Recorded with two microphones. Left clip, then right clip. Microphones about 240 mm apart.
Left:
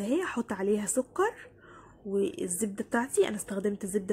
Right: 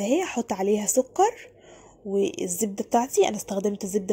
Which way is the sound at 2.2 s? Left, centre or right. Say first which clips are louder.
Right 5 dB; centre.